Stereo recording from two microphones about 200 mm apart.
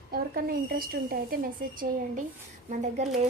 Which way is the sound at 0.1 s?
50° right (ahead or behind).